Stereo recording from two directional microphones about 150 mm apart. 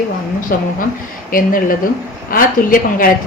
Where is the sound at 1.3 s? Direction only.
70° left (ahead or behind).